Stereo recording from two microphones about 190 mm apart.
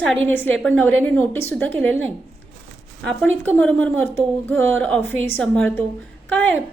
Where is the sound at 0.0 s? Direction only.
5° left (ahead or behind).